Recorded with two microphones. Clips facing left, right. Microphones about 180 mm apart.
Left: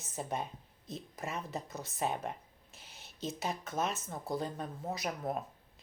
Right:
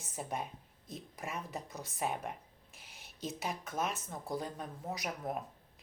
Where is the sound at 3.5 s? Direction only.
30° left (ahead or behind).